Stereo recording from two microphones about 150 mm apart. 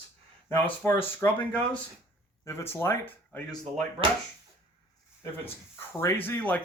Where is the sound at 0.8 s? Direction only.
15° left (ahead or behind).